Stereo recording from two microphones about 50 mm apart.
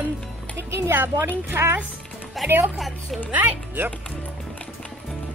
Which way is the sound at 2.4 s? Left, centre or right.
Right.